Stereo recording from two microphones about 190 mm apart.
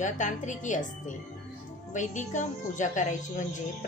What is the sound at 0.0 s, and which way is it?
A woman's voice, 40° left (ahead or behind).